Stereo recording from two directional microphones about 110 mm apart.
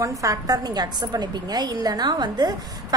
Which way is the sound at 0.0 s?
30° right (ahead or behind).